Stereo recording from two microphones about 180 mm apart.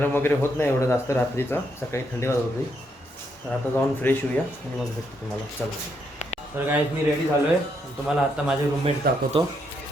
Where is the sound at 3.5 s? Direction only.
10° left (ahead or behind).